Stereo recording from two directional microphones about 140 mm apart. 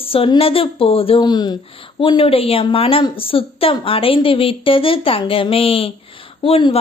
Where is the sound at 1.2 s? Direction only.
30° left (ahead or behind).